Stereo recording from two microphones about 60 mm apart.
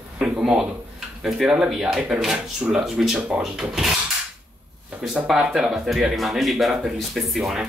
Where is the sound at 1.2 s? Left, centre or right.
Centre.